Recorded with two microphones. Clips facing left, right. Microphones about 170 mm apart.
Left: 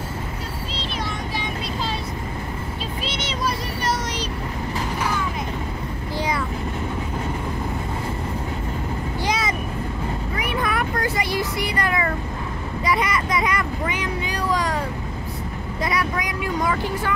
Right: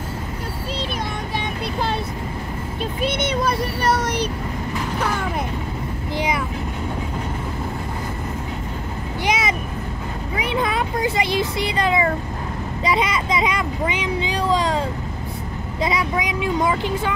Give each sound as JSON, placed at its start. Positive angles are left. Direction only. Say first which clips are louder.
{"t": 3.0, "sound": "child singing", "louder": "right 7 dB", "side_deg": -55}
{"t": 6.1, "sound": "vehicle", "louder": "right 2 dB", "side_deg": -20}
{"t": 9.2, "sound": "vehicle", "louder": "right 3 dB", "side_deg": -20}
{"t": 15.8, "sound": "vehicle", "louder": "right 3 dB", "side_deg": -20}